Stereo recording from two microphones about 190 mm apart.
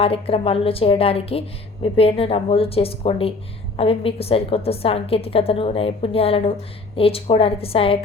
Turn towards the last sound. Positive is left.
turn(degrees=30)  # may be behind; listen again after turning